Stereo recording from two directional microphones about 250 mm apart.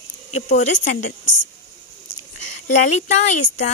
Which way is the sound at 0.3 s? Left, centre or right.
Left.